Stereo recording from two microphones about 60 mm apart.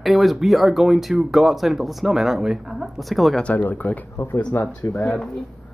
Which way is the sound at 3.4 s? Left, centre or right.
Left.